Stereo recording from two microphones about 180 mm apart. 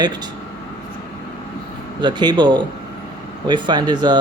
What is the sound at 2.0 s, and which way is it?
Speech, 25° right (ahead or behind).